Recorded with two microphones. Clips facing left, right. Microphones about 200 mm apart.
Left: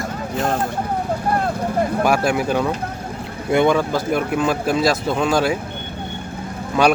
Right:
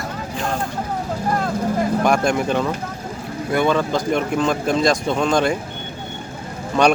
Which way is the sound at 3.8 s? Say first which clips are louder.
Even; 5° left (ahead or behind).